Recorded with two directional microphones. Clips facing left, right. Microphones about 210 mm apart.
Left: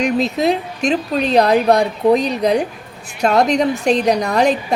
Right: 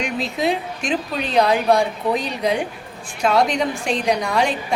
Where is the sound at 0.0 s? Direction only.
40° left (ahead or behind).